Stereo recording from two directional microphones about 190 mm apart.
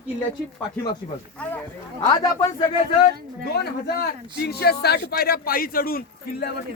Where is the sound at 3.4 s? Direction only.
55° left (ahead or behind).